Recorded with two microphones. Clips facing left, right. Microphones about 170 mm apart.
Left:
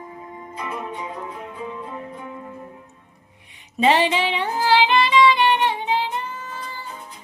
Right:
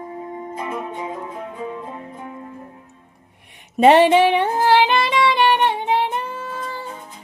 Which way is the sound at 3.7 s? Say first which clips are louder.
Right 7 dB; 55° right (ahead or behind).